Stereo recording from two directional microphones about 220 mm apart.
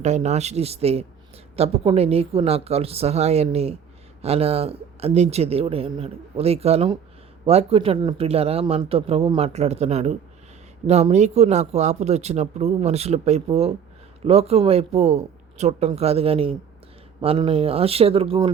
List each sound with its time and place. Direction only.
0.0 s speech: 30° right (ahead or behind)